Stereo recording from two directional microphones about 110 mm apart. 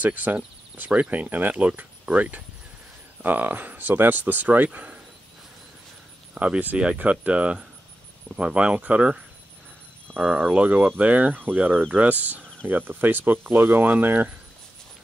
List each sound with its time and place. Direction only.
0.0 s speech: 15° right (ahead or behind)
6.3 s speech: 10° right (ahead or behind)
10.1 s cricket: 10° left (ahead or behind)
10.5 s speech: 15° right (ahead or behind)